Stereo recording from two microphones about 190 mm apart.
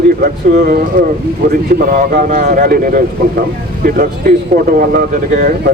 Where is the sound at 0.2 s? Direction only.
50° right (ahead or behind).